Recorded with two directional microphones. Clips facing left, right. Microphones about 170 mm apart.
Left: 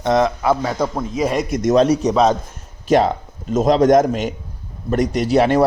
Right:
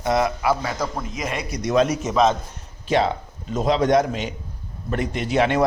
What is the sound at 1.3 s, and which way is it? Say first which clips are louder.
Speech: left 6 dB; 45° left (ahead or behind).